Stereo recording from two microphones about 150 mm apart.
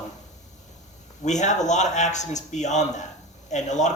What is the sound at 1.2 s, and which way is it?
Speech, 50° left (ahead or behind).